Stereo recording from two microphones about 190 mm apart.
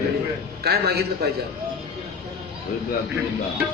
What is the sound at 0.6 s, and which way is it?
Speech, 55° right (ahead or behind).